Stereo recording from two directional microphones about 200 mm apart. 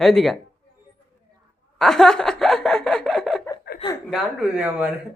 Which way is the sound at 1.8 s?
Centre (ahead or behind).